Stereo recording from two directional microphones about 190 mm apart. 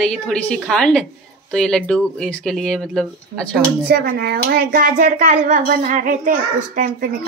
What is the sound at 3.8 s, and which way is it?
Speech, 55° right (ahead or behind).